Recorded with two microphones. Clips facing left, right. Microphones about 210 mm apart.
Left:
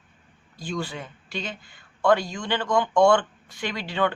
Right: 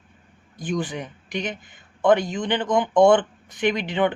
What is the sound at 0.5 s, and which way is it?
Speech, 20° right (ahead or behind).